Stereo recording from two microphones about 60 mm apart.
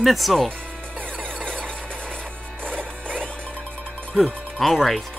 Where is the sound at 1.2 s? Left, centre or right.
Right.